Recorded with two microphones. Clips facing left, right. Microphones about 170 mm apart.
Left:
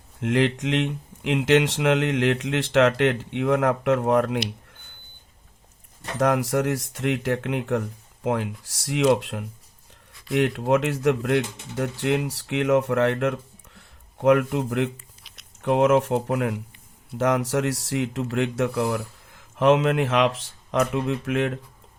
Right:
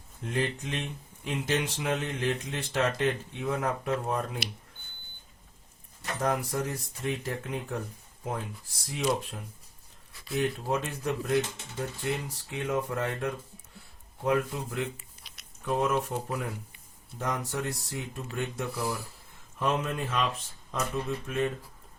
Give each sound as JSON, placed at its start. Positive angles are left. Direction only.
{"t": 0.2, "sound": "speech", "side_deg": 90}
{"t": 6.1, "sound": "speech", "side_deg": 80}
{"t": 14.9, "sound": "a sound", "side_deg": 0}
{"t": 15.6, "sound": "speech", "side_deg": 75}
{"t": 17.2, "sound": "speech", "side_deg": 90}